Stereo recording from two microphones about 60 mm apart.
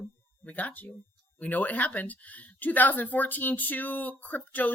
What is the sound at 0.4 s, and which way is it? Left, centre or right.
Speech, left.